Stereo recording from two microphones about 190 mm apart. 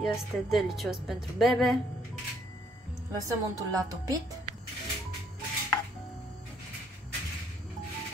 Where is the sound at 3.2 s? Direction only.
15° right (ahead or behind).